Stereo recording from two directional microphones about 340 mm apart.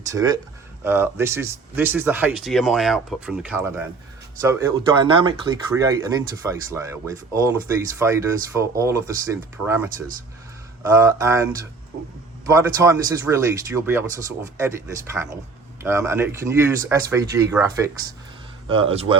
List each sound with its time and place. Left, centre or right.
0.1 s speech: centre
10.9 s speech: centre